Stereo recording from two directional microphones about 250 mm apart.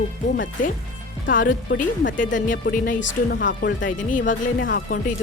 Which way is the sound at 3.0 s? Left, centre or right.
Left.